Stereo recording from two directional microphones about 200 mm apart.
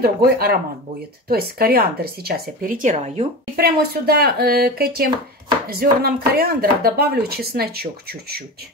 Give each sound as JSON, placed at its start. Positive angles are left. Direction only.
{"t": 0.0, "sound": "speech", "side_deg": -50}
{"t": 3.5, "sound": "speech", "side_deg": -50}